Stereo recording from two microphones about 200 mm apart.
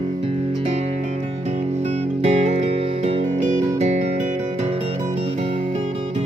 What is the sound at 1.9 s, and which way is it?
Music, 30° right (ahead or behind).